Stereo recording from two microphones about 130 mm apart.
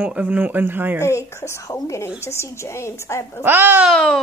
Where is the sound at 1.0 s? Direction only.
20° left (ahead or behind).